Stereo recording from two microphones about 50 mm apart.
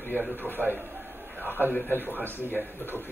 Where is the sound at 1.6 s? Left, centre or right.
Left.